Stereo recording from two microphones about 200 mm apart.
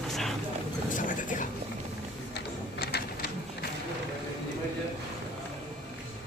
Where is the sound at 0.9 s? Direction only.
40° left (ahead or behind).